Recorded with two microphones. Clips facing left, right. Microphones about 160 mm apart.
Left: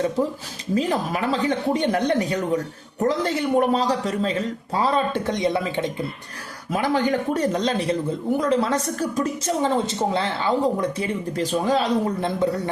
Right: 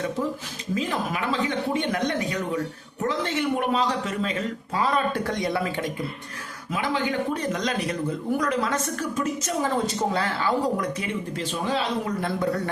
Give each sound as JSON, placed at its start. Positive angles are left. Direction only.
{"t": 0.7, "sound": "speech", "side_deg": 35}
{"t": 6.7, "sound": "speech", "side_deg": 40}